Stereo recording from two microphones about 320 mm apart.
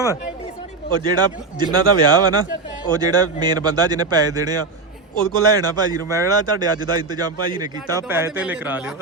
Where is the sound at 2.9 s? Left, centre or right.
Centre.